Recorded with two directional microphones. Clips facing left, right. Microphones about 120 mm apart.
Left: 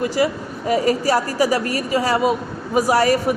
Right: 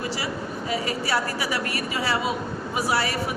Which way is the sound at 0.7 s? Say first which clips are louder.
Left 9 dB; 40° left (ahead or behind).